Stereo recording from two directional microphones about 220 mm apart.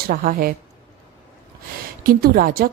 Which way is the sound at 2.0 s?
40° right (ahead or behind).